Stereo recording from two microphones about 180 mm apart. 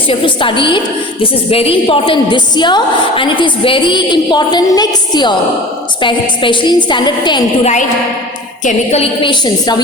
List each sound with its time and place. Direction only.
0.1 s a woman's voice: 30° left (ahead or behind)
7.6 s a woman's voice: 40° left (ahead or behind); by 9.8 s 25° left (ahead or behind)